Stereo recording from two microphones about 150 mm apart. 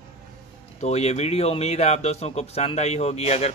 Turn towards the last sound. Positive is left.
turn(degrees=45)  # may be behind; listen again after turning